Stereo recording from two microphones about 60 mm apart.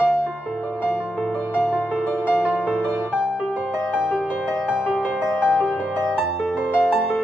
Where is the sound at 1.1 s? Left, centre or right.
Centre.